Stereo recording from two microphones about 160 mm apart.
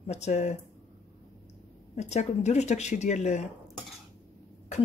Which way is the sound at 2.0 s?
45° left (ahead or behind).